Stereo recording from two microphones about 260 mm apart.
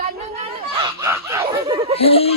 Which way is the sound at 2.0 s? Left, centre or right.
Left.